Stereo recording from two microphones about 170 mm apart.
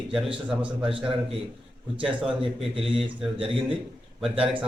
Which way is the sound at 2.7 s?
35° right (ahead or behind).